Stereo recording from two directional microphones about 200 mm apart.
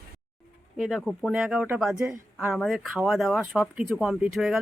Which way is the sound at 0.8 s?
Centre (ahead or behind).